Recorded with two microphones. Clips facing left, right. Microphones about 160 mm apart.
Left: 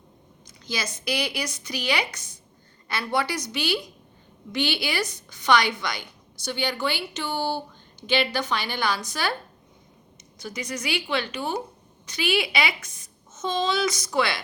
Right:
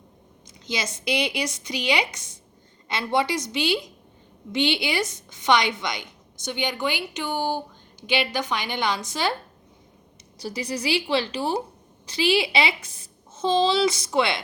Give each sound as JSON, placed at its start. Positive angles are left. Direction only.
{"t": 0.6, "sound": "a woman's voice", "side_deg": -20}
{"t": 10.3, "sound": "a woman's voice", "side_deg": -35}